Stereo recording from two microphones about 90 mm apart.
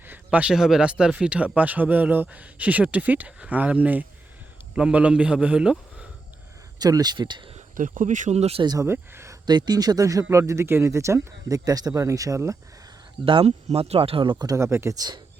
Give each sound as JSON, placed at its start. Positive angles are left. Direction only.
{"t": 0.0, "sound": "a man's voice", "side_deg": -20}
{"t": 6.7, "sound": "speech", "side_deg": -50}
{"t": 8.3, "sound": "speech", "side_deg": -90}
{"t": 8.6, "sound": "speech", "side_deg": -45}
{"t": 8.9, "sound": "speech", "side_deg": -30}
{"t": 9.5, "sound": "speech", "side_deg": -50}
{"t": 13.2, "sound": "speech", "side_deg": -80}
{"t": 14.4, "sound": "speech", "side_deg": -35}
{"t": 14.9, "sound": "speech", "side_deg": -50}